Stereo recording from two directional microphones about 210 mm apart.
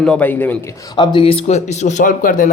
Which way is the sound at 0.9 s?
20° left (ahead or behind).